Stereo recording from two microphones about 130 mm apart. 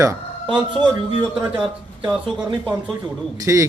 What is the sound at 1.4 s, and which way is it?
Speech, 10° right (ahead or behind).